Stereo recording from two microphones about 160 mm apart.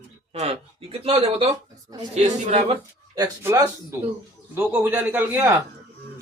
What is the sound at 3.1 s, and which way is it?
Speech, 20° right (ahead or behind).